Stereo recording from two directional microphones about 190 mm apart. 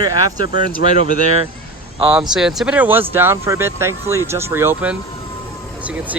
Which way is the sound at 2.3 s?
Centre (ahead or behind).